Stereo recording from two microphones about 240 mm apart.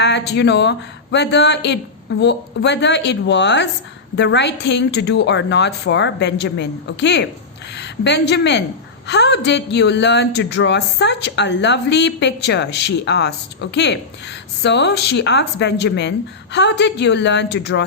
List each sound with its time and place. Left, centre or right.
0.0 s a woman's voice: left